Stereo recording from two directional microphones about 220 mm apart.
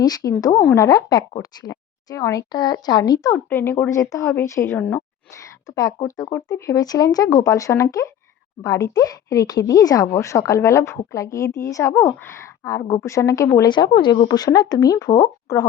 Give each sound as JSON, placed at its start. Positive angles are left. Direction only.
{"t": 0.0, "sound": "speech", "side_deg": 15}